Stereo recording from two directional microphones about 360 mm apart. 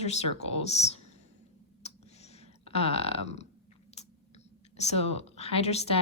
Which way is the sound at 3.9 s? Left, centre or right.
Centre.